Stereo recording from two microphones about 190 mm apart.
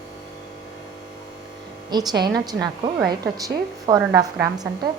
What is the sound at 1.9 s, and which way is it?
A woman's voice, 20° right (ahead or behind).